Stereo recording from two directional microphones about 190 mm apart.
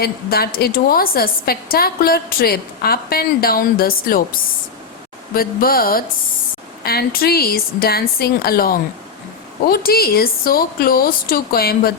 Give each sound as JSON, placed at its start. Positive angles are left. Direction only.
{"t": 0.0, "sound": "a woman's voice", "side_deg": 55}